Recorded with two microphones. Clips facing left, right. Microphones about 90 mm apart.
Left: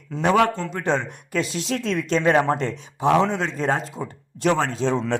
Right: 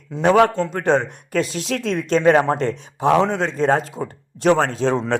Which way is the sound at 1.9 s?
40° right (ahead or behind).